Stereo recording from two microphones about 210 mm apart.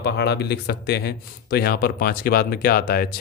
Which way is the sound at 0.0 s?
50° left (ahead or behind).